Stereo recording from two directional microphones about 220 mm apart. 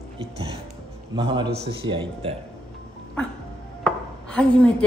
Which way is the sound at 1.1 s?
20° right (ahead or behind).